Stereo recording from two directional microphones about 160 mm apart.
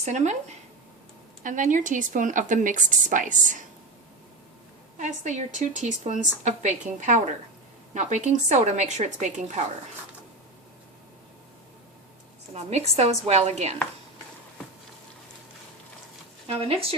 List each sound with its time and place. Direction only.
0.0 s a woman's voice: 45° right (ahead or behind)
1.5 s a woman's voice: 55° right (ahead or behind)
4.9 s a woman's voice: 50° right (ahead or behind)
12.5 s a woman's voice: 40° right (ahead or behind)